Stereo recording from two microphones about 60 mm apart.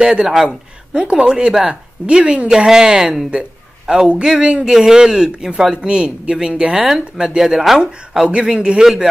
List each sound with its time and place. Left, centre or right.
0.0 s speech: centre
4.6 s speech: centre
6.9 s speech: centre